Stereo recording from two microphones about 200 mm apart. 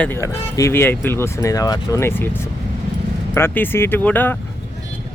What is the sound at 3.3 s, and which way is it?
Speech, 10° left (ahead or behind).